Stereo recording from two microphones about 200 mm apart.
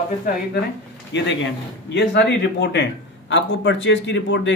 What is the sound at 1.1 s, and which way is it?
A man's voice, 65° left (ahead or behind).